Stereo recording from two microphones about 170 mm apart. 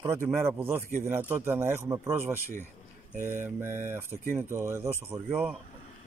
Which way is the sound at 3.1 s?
45° right (ahead or behind).